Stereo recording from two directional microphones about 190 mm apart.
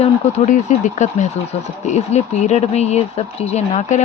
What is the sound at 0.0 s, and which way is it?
Speech, 40° left (ahead or behind).